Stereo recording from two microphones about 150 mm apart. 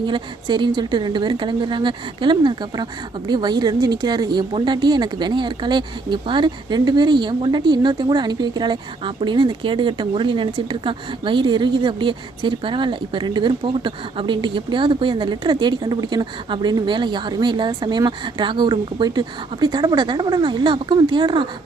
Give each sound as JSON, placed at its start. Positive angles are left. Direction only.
{"t": 0.0, "sound": "speech", "side_deg": -30}